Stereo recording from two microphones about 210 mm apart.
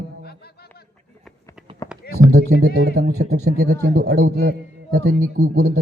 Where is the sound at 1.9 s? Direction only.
5° right (ahead or behind).